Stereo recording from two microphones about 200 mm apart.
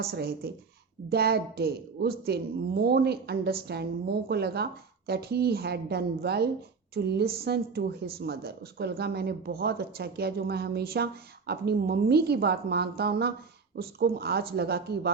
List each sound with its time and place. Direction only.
0.0 s a woman's voice: 55° right (ahead or behind)